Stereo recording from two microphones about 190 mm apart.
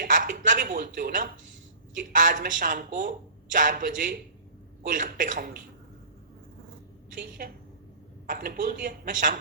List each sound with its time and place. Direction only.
0.0 s a woman's voice: 45° right (ahead or behind)
7.2 s a woman's voice: 50° right (ahead or behind)